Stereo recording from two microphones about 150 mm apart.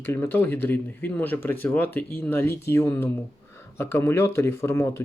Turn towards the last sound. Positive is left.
turn(degrees=15)  # may be behind; listen again after turning